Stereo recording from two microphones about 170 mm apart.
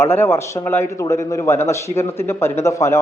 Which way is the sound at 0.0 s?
15° left (ahead or behind).